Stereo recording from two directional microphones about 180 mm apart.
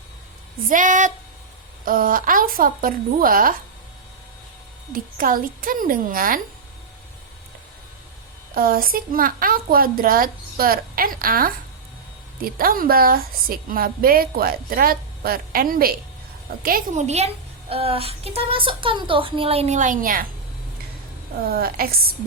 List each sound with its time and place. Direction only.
0.7 s a woman's voice: 45° right (ahead or behind)
4.9 s a woman's voice: 50° right (ahead or behind)
8.5 s a woman's voice: 55° right (ahead or behind)
21.5 s a woman's voice: 55° right (ahead or behind)